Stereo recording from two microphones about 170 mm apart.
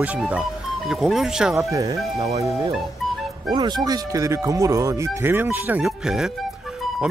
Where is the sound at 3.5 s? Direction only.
25° right (ahead or behind); by 6.3 s centre (ahead or behind).